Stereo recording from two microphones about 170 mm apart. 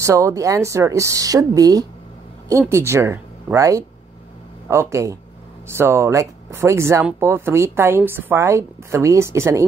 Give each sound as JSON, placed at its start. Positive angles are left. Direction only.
{"t": 0.0, "sound": "speech", "side_deg": -20}